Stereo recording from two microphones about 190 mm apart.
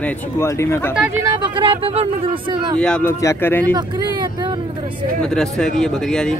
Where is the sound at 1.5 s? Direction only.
25° right (ahead or behind).